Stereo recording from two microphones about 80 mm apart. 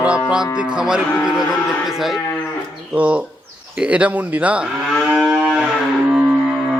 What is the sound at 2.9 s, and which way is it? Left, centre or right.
A man's voice, right.